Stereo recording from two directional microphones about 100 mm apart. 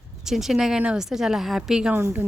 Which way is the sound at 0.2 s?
5° right (ahead or behind).